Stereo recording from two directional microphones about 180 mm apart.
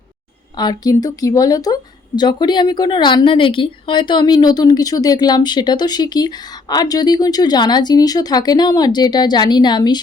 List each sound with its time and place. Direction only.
0.5 s speech: 20° left (ahead or behind)